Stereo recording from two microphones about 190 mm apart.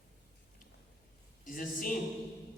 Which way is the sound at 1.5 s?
45° left (ahead or behind).